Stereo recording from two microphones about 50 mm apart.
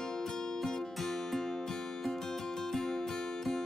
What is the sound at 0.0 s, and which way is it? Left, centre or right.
Music, centre.